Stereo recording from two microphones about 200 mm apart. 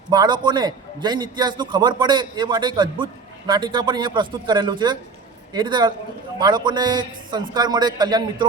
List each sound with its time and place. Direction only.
0.1 s a man's voice: 20° right (ahead or behind)